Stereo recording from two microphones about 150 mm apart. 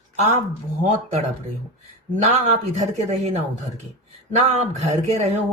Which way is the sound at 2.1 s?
50° right (ahead or behind).